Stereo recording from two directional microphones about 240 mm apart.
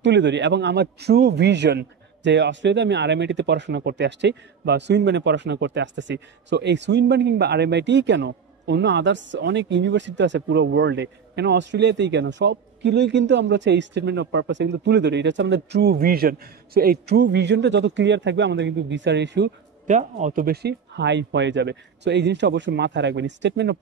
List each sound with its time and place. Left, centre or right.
0.0 s a man's voice: right
19.9 s a man's voice: right